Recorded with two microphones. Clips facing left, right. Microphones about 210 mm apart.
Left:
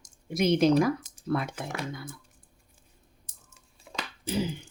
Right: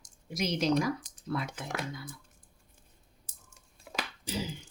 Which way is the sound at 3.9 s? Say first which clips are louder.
Even; 5° right (ahead or behind).